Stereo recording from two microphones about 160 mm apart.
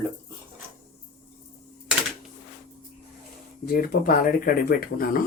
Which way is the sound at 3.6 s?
65° left (ahead or behind).